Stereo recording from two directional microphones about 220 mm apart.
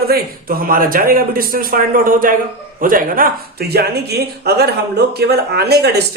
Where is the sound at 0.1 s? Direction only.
40° right (ahead or behind).